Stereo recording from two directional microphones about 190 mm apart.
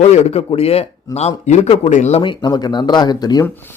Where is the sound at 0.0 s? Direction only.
35° left (ahead or behind).